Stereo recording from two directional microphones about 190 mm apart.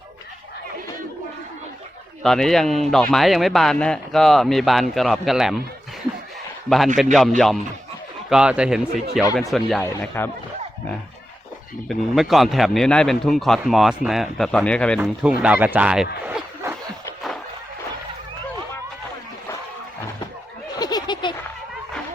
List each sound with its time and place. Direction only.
2.2 s a man's voice: centre (ahead or behind)
6.7 s a man's voice: centre (ahead or behind)
10.2 s speech: 10° left (ahead or behind)
11.9 s a man's voice: centre (ahead or behind)
16.2 s a sound: 10° right (ahead or behind)
20.7 s a sound: 20° left (ahead or behind)